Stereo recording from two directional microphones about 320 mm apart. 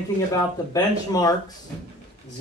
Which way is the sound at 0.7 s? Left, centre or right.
Centre.